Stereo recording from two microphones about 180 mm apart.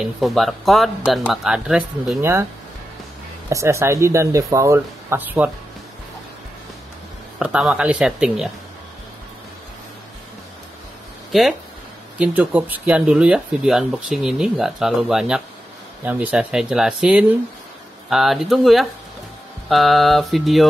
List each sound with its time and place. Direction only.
0.0 s speech: centre (ahead or behind)
3.4 s speech: 15° right (ahead or behind)
7.3 s speech: 5° right (ahead or behind)
12.2 s speech: 10° right (ahead or behind)